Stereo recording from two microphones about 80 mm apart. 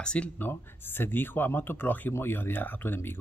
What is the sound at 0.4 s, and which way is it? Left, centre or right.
Speech, left.